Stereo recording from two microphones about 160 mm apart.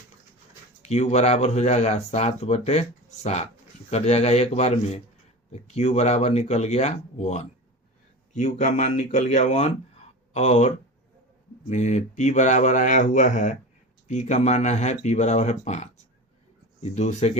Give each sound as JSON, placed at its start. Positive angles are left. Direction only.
{"t": 0.8, "sound": "speech", "side_deg": 45}
{"t": 3.8, "sound": "speech", "side_deg": 40}
{"t": 11.7, "sound": "speech", "side_deg": 45}